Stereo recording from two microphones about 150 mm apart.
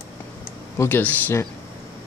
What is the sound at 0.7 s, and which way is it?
Speech, 15° left (ahead or behind).